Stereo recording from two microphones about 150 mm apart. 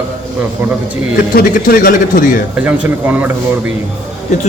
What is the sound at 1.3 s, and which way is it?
Speech, 70° left (ahead or behind).